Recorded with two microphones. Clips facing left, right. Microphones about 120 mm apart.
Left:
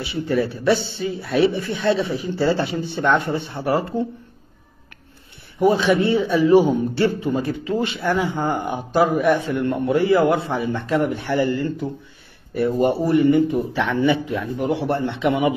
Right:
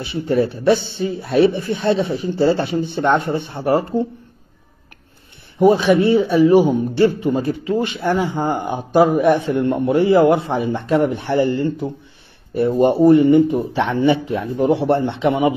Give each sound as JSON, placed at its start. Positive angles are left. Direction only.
{"t": 0.3, "sound": "a man's voice", "side_deg": -20}
{"t": 5.6, "sound": "a man's voice", "side_deg": -15}